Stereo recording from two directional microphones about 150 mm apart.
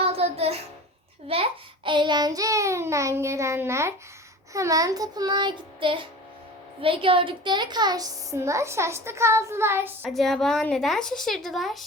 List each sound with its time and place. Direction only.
0.0 s a sound: 40° right (ahead or behind)
1.3 s a woman's voice: 35° right (ahead or behind); by 10.1 s 15° right (ahead or behind)
10.1 s a woman's voice: centre (ahead or behind)